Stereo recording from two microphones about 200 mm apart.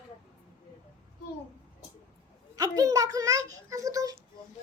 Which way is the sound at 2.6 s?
15° right (ahead or behind).